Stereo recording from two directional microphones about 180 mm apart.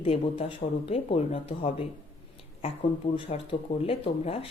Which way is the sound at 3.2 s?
30° left (ahead or behind).